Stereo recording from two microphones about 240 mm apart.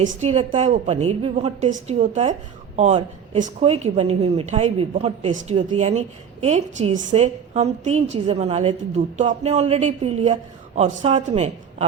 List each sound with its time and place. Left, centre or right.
0.0 s speech: right